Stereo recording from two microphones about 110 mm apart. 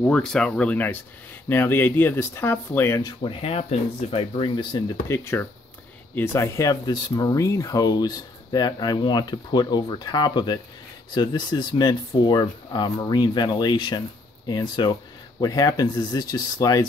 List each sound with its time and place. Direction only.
0.0 s speech: 10° left (ahead or behind)
3.3 s speech: 70° left (ahead or behind)
4.4 s speech: 45° left (ahead or behind)
5.0 s speech: 25° left (ahead or behind)